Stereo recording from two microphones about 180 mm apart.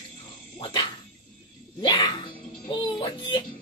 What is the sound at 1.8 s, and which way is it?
A child's voice, 25° left (ahead or behind).